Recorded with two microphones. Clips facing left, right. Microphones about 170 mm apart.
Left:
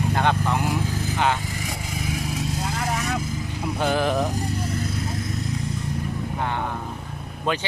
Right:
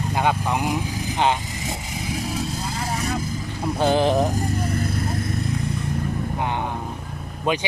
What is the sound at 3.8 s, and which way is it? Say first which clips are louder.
Speech: right 4 dB; 30° right (ahead or behind).